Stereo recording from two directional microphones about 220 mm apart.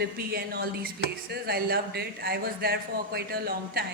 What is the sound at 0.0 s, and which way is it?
Speech, 45° right (ahead or behind).